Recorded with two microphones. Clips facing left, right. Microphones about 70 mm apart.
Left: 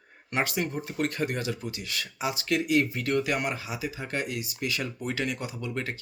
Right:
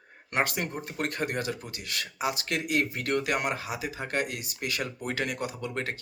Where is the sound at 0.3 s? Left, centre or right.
Right.